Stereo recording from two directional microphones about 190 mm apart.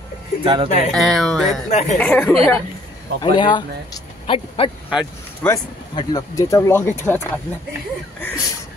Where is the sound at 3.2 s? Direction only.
25° left (ahead or behind).